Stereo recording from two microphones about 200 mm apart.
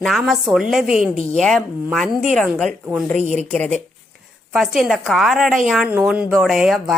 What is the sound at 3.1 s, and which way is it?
Speech, 35° right (ahead or behind).